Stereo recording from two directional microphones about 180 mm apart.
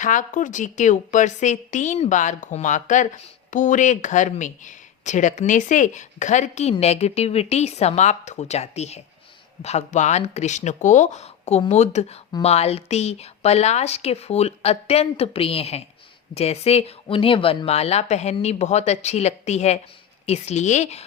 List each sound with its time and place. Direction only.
0.0 s a woman's voice: 45° left (ahead or behind)